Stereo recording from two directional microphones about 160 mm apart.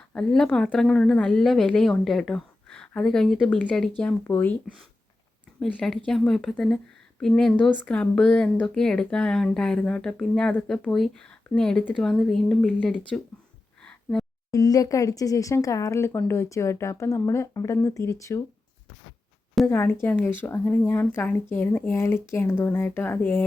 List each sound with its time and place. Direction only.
0.1 s speech: 5° left (ahead or behind)
5.5 s speech: 5° left (ahead or behind)
13.8 s a sound: 5° left (ahead or behind)
14.5 s speech: 20° left (ahead or behind)
19.6 s speech: 15° left (ahead or behind)